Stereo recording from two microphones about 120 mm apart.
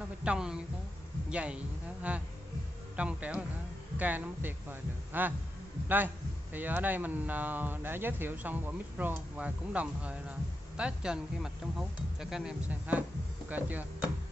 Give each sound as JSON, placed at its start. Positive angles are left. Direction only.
{"t": 0.0, "sound": "a woman's voice", "side_deg": -10}